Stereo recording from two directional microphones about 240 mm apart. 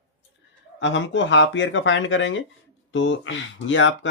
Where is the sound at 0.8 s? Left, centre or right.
Left.